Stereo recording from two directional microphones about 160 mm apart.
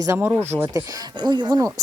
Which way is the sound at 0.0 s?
15° right (ahead or behind).